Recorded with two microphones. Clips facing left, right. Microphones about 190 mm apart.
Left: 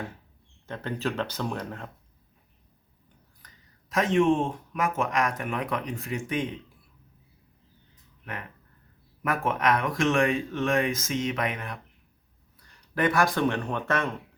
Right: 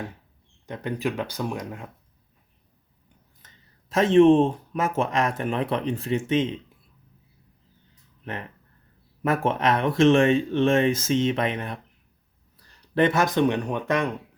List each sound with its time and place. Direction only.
0.7 s speech: 15° right (ahead or behind)
3.4 s speech: 25° right (ahead or behind)
8.2 s speech: 30° right (ahead or behind)